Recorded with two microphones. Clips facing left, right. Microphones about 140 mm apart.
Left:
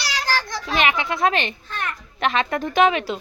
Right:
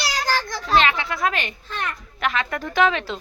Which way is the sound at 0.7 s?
15° left (ahead or behind).